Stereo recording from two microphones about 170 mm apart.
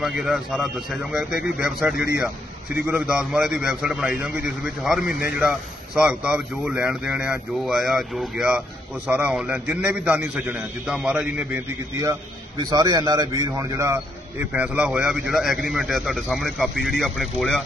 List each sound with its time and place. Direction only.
0.0 s a man's voice: 5° right (ahead or behind)